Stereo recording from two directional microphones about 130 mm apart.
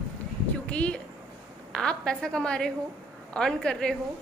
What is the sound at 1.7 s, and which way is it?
A woman's voice, 5° left (ahead or behind).